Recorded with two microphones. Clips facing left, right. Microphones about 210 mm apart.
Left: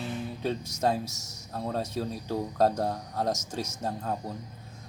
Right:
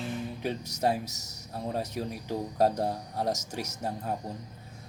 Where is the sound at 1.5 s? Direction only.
15° right (ahead or behind).